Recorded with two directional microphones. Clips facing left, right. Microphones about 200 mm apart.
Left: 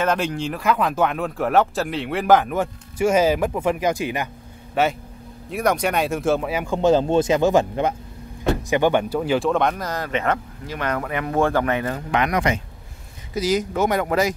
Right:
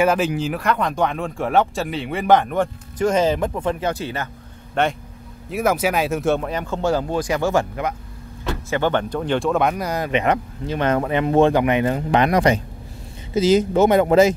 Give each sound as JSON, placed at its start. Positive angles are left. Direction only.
{"t": 0.0, "sound": "speech", "side_deg": -10}
{"t": 13.3, "sound": "speech", "side_deg": -25}